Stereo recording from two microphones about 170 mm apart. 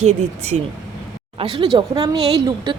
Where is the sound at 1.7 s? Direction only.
25° right (ahead or behind).